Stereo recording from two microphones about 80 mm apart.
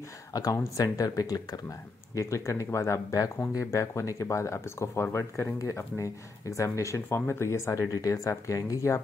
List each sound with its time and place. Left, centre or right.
0.3 s speech: left
2.1 s speech: left